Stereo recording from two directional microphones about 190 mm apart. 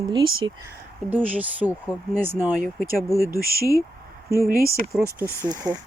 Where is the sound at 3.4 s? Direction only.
50° right (ahead or behind).